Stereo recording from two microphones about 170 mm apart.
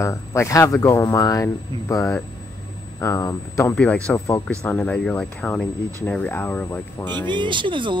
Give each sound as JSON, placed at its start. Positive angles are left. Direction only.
{"t": 0.0, "sound": "speech", "side_deg": 15}
{"t": 3.7, "sound": "speech", "side_deg": 5}
{"t": 7.2, "sound": "speech", "side_deg": -30}